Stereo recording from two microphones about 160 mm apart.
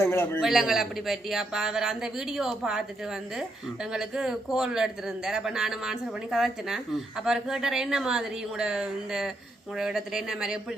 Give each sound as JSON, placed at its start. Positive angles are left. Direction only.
{"t": 0.0, "sound": "a man's voice", "side_deg": 15}
{"t": 0.4, "sound": "a man's voice", "side_deg": 0}
{"t": 3.9, "sound": "a man's voice", "side_deg": -5}